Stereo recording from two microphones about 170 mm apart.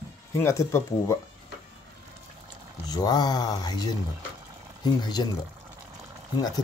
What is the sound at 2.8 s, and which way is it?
Speech, 25° left (ahead or behind).